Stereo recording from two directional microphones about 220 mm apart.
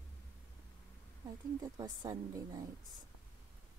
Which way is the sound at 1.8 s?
15° right (ahead or behind).